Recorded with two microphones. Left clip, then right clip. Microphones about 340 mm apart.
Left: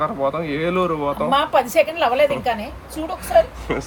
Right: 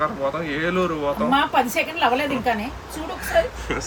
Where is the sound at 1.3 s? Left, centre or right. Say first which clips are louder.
Left 3 dB; centre.